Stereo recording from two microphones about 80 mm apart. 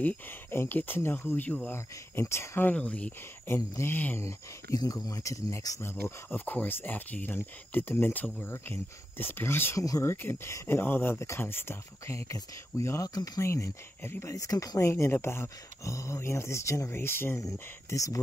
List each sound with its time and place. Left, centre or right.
0.0 s speech: left
2.7 s speech: centre
3.4 s speech: left
4.2 s speech: left
4.7 s speech: left
5.8 s speech: left
9.8 s speech: left
10.1 s speech: left
13.1 s speech: left
13.4 s speech: left
14.8 s speech: left
16.9 s speech: left
17.4 s speech: left